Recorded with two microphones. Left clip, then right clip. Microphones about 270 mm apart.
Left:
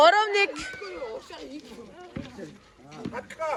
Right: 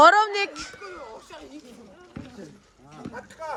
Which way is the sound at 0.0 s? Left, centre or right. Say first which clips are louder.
Right 3 dB; right.